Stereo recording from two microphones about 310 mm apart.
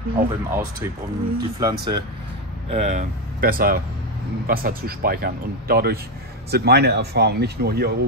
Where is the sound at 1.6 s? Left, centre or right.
Centre.